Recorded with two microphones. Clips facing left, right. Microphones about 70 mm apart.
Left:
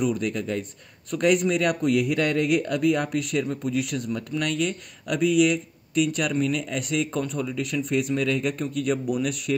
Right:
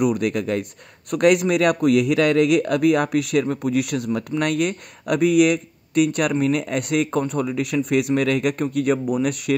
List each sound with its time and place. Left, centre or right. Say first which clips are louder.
0.0 s a man's voice: right 5 dB; right
6.3 s a man's voice: right 5 dB; right